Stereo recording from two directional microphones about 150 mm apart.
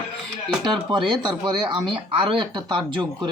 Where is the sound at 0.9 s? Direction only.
30° right (ahead or behind).